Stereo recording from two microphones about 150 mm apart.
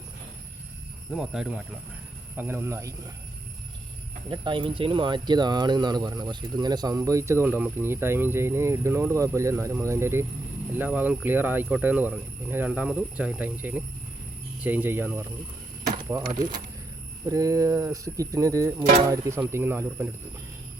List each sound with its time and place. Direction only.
1.1 s speech: centre (ahead or behind)
2.3 s speech: 15° right (ahead or behind)
4.3 s speech: 35° right (ahead or behind); by 20.1 s 15° right (ahead or behind)